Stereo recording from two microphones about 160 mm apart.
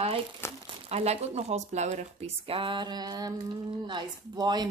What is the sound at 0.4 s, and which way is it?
Crumpling, 15° left (ahead or behind).